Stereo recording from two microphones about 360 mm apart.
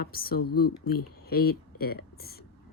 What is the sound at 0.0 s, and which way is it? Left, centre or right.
Speech, left.